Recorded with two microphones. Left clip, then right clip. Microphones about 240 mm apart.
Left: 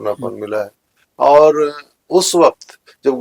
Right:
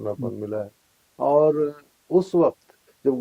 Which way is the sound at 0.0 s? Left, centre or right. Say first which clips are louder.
Left 8 dB; centre.